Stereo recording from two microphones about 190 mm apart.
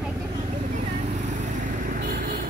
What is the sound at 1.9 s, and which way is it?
Vehicle, 50° right (ahead or behind).